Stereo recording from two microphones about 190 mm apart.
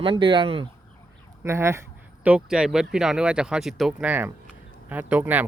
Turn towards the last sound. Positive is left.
turn(degrees=-10)  # may be behind; listen again after turning